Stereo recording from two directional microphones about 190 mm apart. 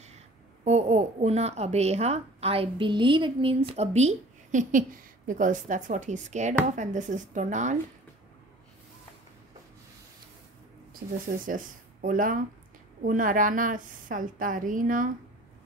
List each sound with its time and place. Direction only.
0.7 s a woman's voice: 35° right (ahead or behind)
10.9 s a woman's voice: 45° right (ahead or behind)